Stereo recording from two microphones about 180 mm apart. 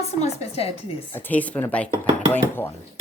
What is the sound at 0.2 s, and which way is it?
Speech, 35° left (ahead or behind).